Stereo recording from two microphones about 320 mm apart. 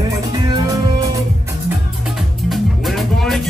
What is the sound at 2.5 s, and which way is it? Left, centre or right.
Music, centre.